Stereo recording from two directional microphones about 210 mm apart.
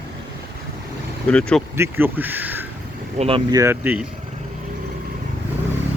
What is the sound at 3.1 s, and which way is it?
Speech, 30° right (ahead or behind).